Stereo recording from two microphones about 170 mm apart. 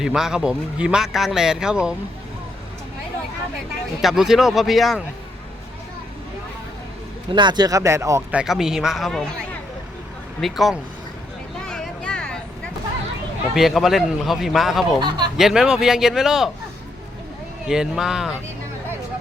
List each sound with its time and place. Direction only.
0.0 s speech: 5° right (ahead or behind)
4.0 s speech: centre (ahead or behind)
7.3 s speech: 25° right (ahead or behind)
8.4 s speech: 5° right (ahead or behind)
10.4 s speech: centre (ahead or behind)
11.7 s a sound: 5° left (ahead or behind)
13.5 s speech: centre (ahead or behind)
15.0 s speech: 25° right (ahead or behind)
15.4 s speech: 5° right (ahead or behind)
17.7 s speech: 5° right (ahead or behind)